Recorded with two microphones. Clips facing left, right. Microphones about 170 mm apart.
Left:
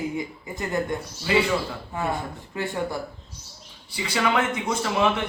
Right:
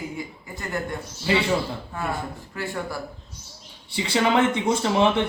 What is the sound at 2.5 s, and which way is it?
Speech, 20° left (ahead or behind).